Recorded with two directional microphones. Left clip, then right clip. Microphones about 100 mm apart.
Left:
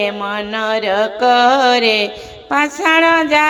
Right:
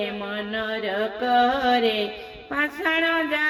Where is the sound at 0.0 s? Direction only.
35° left (ahead or behind).